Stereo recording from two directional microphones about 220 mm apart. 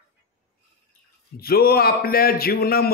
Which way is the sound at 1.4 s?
45° left (ahead or behind).